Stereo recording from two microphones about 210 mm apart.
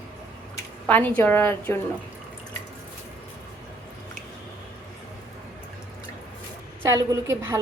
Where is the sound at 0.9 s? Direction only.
10° left (ahead or behind).